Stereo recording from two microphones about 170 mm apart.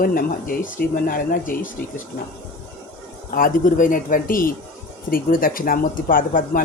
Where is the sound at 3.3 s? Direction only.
55° left (ahead or behind).